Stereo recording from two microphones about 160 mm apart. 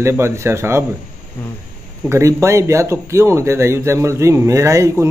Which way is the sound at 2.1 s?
20° right (ahead or behind).